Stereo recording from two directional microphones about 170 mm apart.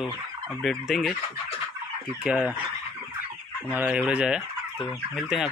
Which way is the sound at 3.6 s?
10° right (ahead or behind).